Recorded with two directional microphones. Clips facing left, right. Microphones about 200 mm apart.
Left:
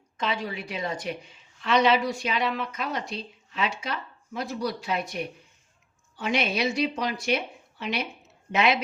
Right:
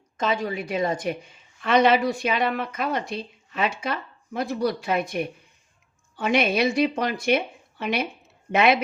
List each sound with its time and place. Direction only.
0.2 s a woman's voice: 45° right (ahead or behind)